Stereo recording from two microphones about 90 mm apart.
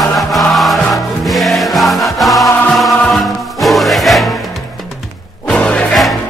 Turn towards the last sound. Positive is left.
turn(degrees=10)  # may be behind; listen again after turning